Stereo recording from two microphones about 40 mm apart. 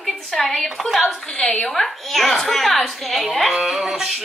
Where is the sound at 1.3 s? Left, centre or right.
Left.